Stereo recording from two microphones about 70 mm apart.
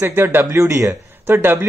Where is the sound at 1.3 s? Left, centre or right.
Right.